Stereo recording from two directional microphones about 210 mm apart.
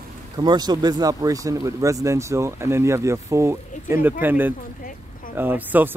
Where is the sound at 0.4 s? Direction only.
20° right (ahead or behind).